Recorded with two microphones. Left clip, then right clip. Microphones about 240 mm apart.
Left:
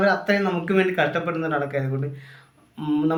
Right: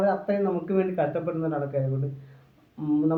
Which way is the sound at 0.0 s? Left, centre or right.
Left.